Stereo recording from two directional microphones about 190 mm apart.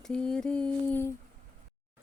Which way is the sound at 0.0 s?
5° left (ahead or behind).